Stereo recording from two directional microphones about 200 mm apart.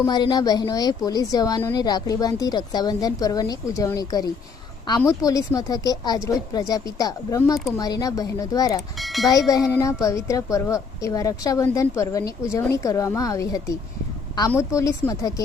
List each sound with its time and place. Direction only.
0.0 s a woman's voice: 20° left (ahead or behind)
9.0 s speech: centre (ahead or behind)
9.3 s a woman's voice: 20° left (ahead or behind)